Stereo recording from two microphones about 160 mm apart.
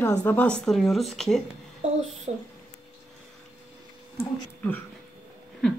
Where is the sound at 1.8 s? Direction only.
45° right (ahead or behind).